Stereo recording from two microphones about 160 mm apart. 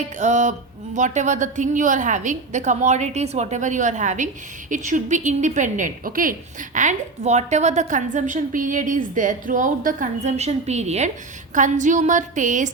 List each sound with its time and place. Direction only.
0.2 s a woman's voice: 50° right (ahead or behind)
6.7 s a woman's voice: 45° right (ahead or behind)